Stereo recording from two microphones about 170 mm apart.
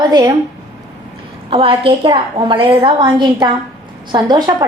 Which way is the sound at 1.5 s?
30° right (ahead or behind).